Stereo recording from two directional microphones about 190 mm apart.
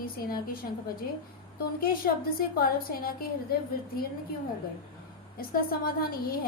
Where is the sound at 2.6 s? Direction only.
50° left (ahead or behind).